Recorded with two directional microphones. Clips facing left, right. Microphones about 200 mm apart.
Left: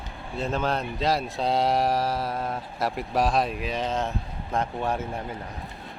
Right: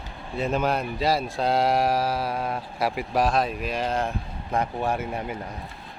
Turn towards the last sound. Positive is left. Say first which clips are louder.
# right 2 dB
turn(degrees=-15)  # may be behind; listen again after turning